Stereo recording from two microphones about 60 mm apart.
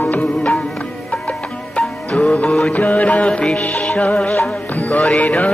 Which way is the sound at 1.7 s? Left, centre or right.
Left.